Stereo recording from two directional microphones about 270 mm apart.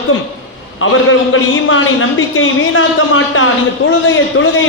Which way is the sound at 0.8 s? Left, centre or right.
Left.